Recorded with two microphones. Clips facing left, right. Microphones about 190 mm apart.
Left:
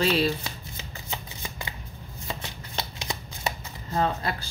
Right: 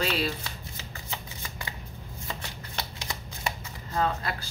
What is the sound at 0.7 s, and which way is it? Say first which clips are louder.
Shuffling cards: left 2 dB; 20° left (ahead or behind).